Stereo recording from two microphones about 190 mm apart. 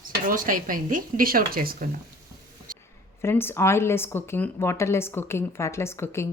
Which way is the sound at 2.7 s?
45° right (ahead or behind).